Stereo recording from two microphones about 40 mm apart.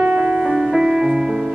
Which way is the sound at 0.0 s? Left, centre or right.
Right.